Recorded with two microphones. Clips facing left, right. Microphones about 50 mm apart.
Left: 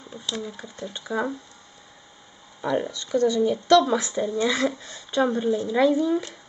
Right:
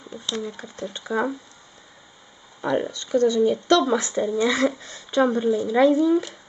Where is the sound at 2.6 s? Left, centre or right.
Centre.